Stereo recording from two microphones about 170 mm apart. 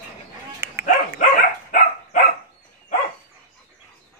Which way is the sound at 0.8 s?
50° left (ahead or behind).